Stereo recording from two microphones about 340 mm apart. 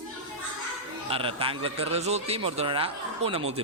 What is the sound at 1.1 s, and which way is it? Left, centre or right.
A man's voice, centre.